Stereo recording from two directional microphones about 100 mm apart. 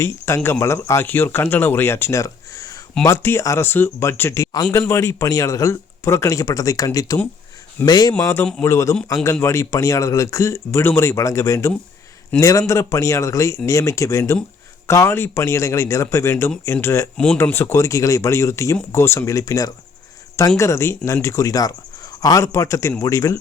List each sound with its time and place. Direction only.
0.0 s speech: 25° left (ahead or behind)
8.2 s speech: 25° left (ahead or behind)